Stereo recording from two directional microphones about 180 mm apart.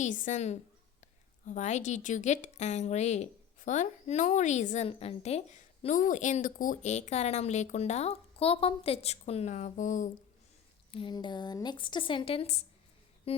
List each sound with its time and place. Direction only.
0.0 s a woman's voice: 45° left (ahead or behind)
10.9 s a woman's voice: 25° left (ahead or behind)
13.3 s music: 35° left (ahead or behind)